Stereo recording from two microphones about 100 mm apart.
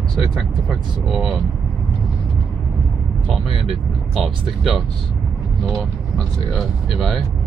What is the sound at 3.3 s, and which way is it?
Speech, centre (ahead or behind).